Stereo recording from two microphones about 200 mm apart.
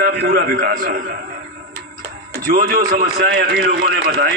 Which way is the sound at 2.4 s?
45° right (ahead or behind).